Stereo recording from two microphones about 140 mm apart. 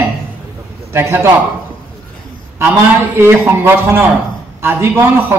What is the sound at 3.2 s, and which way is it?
Speech, 15° right (ahead or behind).